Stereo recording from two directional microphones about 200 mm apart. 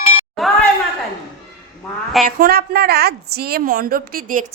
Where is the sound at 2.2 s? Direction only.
50° right (ahead or behind).